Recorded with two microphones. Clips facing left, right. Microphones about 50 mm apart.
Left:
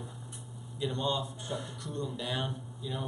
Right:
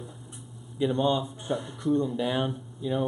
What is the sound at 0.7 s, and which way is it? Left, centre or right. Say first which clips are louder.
Speech: right 8 dB; right.